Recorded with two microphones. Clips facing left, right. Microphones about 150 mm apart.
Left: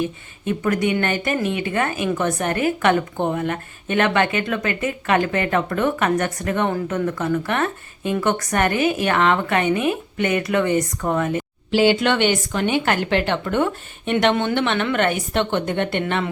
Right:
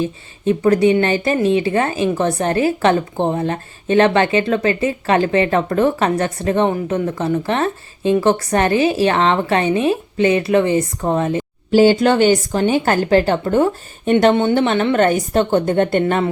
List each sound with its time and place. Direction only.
0.0 s speech: 30° right (ahead or behind)
11.7 s a woman's voice: 40° right (ahead or behind)